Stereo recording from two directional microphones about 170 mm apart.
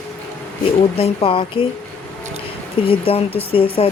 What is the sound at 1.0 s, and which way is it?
Speech, 35° left (ahead or behind).